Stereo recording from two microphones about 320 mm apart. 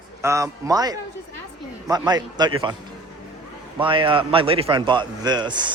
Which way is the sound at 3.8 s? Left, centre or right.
Centre.